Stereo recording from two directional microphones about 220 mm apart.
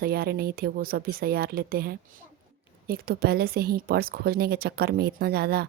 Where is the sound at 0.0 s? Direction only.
45° right (ahead or behind).